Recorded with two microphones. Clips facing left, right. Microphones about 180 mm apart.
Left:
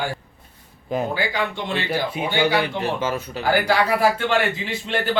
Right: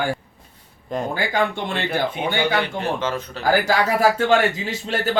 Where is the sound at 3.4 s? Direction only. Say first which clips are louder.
Right 1 dB; 45° right (ahead or behind).